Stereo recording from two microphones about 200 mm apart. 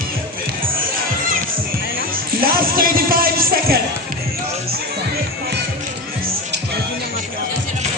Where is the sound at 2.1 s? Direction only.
45° right (ahead or behind).